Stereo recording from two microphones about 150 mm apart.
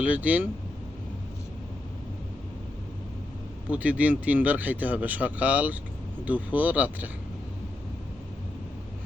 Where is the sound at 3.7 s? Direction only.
10° right (ahead or behind).